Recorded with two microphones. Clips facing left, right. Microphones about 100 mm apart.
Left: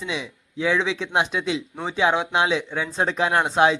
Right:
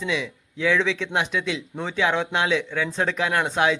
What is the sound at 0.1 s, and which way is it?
Speech, 25° left (ahead or behind).